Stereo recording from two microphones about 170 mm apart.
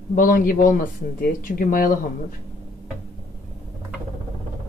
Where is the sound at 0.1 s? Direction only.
55° left (ahead or behind).